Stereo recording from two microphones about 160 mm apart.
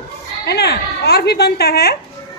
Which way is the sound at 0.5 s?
90° left.